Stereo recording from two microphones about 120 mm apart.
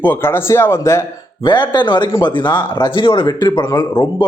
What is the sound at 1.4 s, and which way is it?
A man's voice, 40° left (ahead or behind).